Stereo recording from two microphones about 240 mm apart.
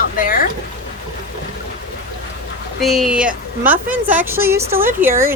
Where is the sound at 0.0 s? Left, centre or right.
Left.